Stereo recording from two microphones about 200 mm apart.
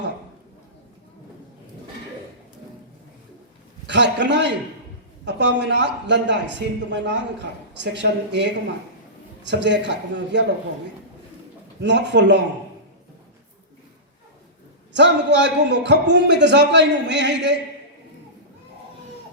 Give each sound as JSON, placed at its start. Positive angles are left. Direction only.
{"t": 3.8, "sound": "a man's voice", "side_deg": -60}
{"t": 11.8, "sound": "a man's voice", "side_deg": -60}
{"t": 14.9, "sound": "a man's voice", "side_deg": -60}